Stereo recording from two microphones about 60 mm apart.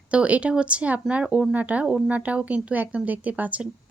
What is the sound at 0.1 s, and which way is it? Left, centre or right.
Speech, right.